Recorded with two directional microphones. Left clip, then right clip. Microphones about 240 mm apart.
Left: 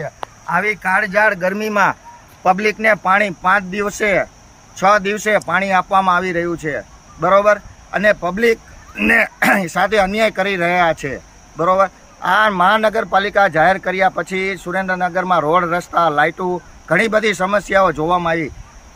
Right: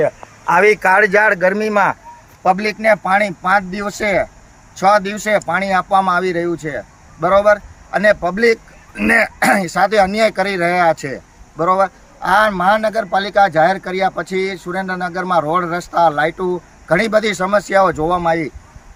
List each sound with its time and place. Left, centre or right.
0.8 s speech: centre